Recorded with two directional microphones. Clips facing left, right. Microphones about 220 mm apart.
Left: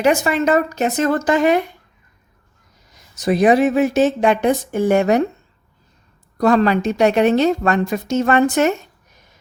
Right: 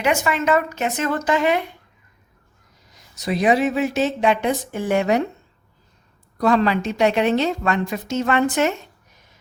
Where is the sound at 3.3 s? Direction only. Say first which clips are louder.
Left 5 dB; 50° left (ahead or behind).